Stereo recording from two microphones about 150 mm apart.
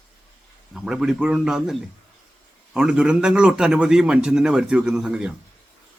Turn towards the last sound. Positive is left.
turn(degrees=-5)  # may be behind; listen again after turning